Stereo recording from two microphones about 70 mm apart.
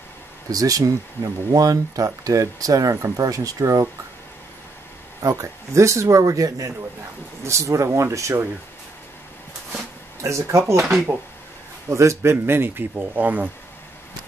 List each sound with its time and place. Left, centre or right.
0.5 s speech: right
5.2 s speech: right
10.2 s speech: right
11.9 s speech: right